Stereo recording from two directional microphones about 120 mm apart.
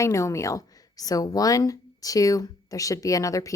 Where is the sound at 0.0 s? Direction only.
25° left (ahead or behind).